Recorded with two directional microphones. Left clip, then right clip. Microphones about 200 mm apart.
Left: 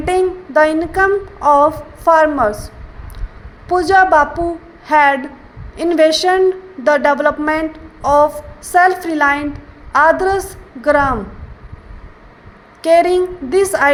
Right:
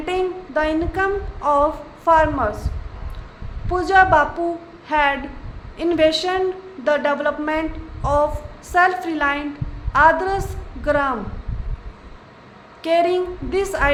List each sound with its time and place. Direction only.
0.0 s female singing: 30° left (ahead or behind)
3.7 s female singing: 30° left (ahead or behind)
8.0 s a sound: 30° left (ahead or behind)
8.7 s female singing: 30° left (ahead or behind)
12.8 s female singing: 30° left (ahead or behind)